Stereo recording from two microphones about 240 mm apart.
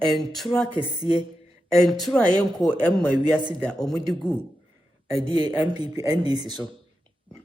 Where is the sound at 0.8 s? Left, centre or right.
Centre.